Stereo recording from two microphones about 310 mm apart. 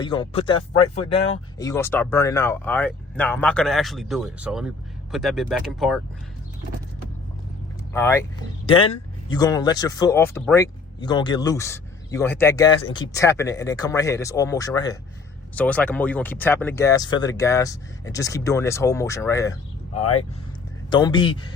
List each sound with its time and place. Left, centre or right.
0.0 s speech: centre
7.9 s speech: centre
20.9 s speech: centre